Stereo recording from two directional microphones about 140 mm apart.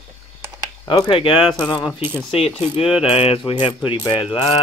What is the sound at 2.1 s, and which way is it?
Mechanisms, 40° left (ahead or behind).